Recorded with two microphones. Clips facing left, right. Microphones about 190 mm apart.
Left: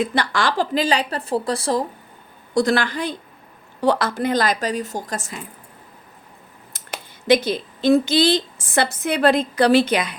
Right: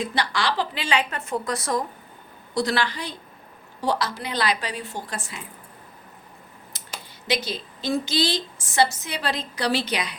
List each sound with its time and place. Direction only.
0.0 s a woman's voice: 50° left (ahead or behind); by 1.9 s 30° left (ahead or behind)
2.6 s a woman's voice: 50° left (ahead or behind)
6.7 s speech: 50° left (ahead or behind)